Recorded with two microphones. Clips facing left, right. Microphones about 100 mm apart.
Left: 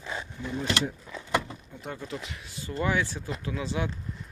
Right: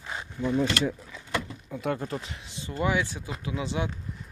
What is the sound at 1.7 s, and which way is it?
Speech, 65° right (ahead or behind).